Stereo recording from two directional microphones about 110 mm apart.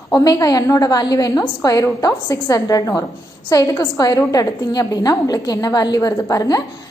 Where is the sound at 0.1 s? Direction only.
35° left (ahead or behind).